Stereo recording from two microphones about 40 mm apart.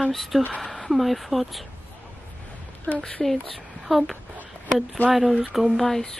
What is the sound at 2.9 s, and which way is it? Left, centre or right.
Speech, centre.